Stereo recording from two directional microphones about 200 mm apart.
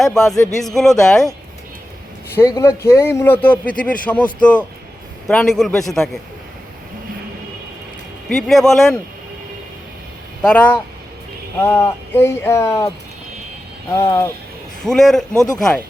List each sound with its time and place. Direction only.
0.0 s speech: centre (ahead or behind)
2.3 s speech: 15° left (ahead or behind)
8.3 s speech: centre (ahead or behind)
10.4 s speech: 5° left (ahead or behind)
13.9 s speech: 15° left (ahead or behind)
14.8 s speech: centre (ahead or behind)